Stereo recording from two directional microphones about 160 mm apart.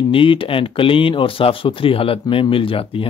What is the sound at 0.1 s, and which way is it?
Speech, 35° left (ahead or behind).